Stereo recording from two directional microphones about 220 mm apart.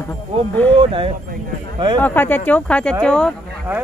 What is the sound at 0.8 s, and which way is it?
Speech, 25° right (ahead or behind).